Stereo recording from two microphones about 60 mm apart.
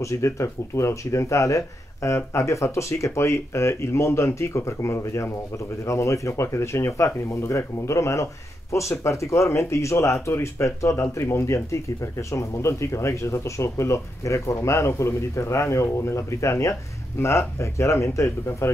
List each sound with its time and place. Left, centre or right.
0.0 s speech: left